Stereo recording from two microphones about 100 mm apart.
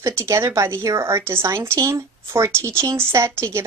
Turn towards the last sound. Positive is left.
turn(degrees=-25)  # may be behind; listen again after turning